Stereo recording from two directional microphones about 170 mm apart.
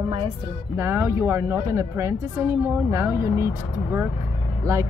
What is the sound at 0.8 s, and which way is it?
Speech, 15° right (ahead or behind).